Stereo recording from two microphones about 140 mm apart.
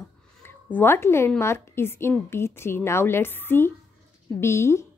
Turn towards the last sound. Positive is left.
turn(degrees=20)  # may be behind; listen again after turning